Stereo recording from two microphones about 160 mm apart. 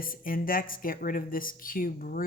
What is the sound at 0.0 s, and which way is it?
Speech, 60° left (ahead or behind).